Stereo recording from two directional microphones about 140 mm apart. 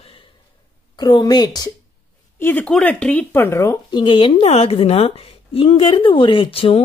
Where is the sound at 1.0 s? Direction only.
30° left (ahead or behind).